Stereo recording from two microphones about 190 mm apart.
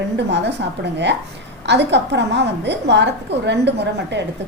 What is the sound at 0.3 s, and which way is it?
Speech, 65° right (ahead or behind).